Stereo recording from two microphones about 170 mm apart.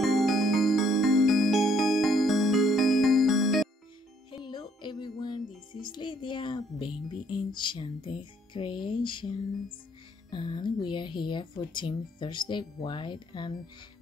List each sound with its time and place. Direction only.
0.0 s music: centre (ahead or behind)
4.5 s music: 25° left (ahead or behind)
10.3 s speech: 25° left (ahead or behind)